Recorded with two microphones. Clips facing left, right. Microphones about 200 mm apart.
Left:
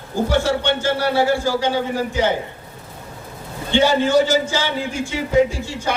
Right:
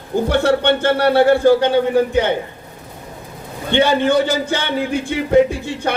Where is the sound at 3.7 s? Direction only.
60° right (ahead or behind).